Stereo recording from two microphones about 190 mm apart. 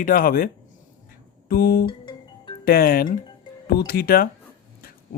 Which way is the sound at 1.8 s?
25° left (ahead or behind).